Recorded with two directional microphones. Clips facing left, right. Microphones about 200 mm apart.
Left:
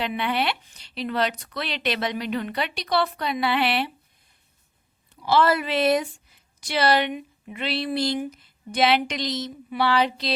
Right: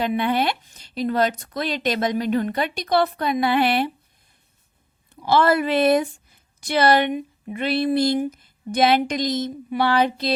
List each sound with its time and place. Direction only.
0.0 s speech: 45° right (ahead or behind)
5.2 s speech: 50° right (ahead or behind)